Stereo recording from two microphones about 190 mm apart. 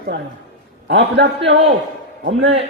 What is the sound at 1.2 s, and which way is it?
Speech, 70° right (ahead or behind).